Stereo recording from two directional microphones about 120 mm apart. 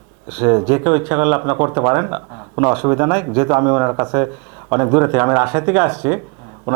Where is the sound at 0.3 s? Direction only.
20° right (ahead or behind).